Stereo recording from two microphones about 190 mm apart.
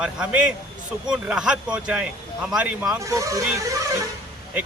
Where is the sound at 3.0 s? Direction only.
15° right (ahead or behind).